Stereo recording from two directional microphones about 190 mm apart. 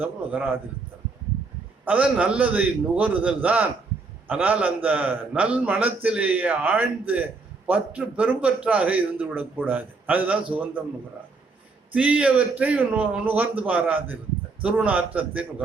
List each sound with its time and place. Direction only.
0.0 s a man's voice: 10° right (ahead or behind)
1.8 s a man's voice: 10° right (ahead or behind)
11.9 s a man's voice: 5° right (ahead or behind)